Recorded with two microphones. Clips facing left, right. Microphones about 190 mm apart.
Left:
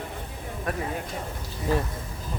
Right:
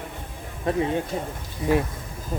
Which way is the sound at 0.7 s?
25° right (ahead or behind).